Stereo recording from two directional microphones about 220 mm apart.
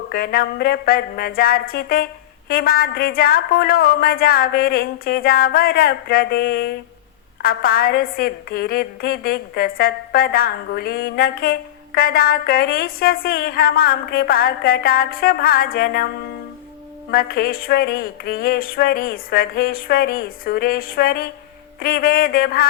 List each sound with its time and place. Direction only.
0.1 s a woman's voice: 45° left (ahead or behind)
17.1 s a woman's voice: 40° left (ahead or behind)
21.8 s a sound: 40° left (ahead or behind)